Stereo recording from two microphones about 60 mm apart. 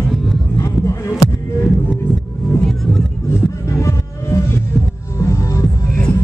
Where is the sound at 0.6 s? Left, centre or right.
Left.